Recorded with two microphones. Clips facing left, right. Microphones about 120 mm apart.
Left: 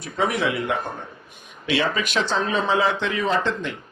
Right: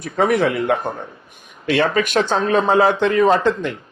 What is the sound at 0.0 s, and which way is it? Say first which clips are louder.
Speech: right 6 dB; 50° right (ahead or behind).